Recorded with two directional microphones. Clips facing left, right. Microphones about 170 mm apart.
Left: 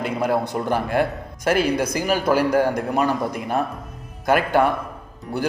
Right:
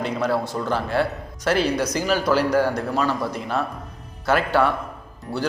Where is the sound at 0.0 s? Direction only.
15° left (ahead or behind).